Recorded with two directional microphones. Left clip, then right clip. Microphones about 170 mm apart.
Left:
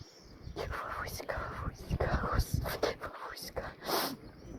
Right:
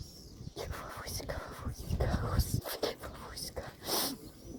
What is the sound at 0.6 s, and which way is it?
Whispering, 10° right (ahead or behind).